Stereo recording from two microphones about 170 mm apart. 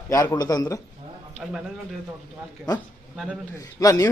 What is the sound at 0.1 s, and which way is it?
Speech, 20° left (ahead or behind).